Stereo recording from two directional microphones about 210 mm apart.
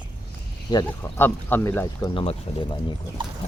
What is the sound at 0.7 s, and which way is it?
Speech, 15° left (ahead or behind).